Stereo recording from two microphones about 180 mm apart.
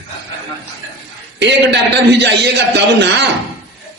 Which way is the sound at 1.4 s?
70° right (ahead or behind).